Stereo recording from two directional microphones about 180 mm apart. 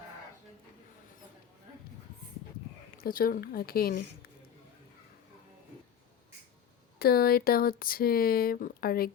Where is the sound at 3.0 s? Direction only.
55° left (ahead or behind).